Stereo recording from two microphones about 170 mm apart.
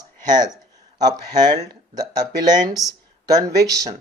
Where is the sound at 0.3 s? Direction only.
25° right (ahead or behind).